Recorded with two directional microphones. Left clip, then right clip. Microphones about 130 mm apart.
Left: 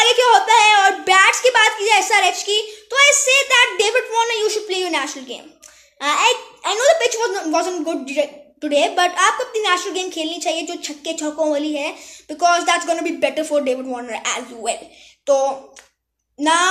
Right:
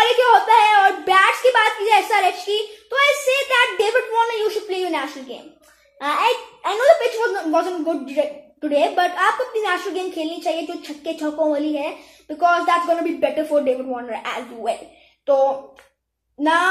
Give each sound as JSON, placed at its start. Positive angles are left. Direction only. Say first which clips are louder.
{"t": 0.0, "sound": "speech", "louder": "left 1 dB", "side_deg": 20}